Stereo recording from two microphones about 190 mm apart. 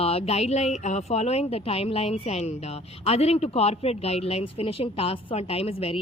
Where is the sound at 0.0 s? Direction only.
30° left (ahead or behind).